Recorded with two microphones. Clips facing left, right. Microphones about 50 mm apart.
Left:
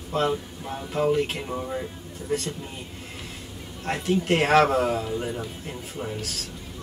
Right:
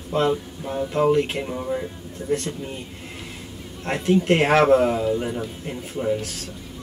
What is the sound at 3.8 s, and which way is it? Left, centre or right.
A man's voice, centre.